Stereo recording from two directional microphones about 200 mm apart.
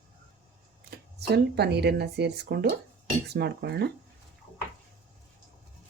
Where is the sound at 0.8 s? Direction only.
50° right (ahead or behind).